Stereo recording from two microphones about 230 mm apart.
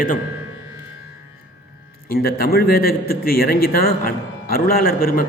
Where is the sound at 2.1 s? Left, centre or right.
Left.